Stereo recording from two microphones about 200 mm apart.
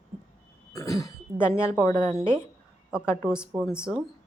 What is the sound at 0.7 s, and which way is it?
A woman's voice, 15° left (ahead or behind).